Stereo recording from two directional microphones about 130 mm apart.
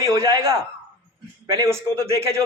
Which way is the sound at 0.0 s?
20° right (ahead or behind).